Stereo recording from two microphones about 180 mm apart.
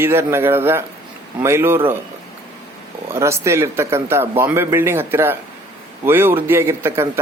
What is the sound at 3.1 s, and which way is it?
Speech, 15° right (ahead or behind).